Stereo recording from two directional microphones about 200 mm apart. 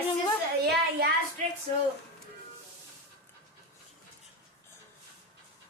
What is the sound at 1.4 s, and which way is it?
Speech, 40° right (ahead or behind).